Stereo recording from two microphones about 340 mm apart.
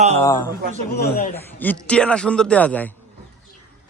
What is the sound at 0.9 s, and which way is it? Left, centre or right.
Speech, left.